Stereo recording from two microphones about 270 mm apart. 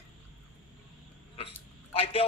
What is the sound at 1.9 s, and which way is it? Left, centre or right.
Speech, left.